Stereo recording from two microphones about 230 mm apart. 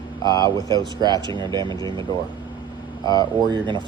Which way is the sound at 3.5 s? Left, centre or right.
Centre.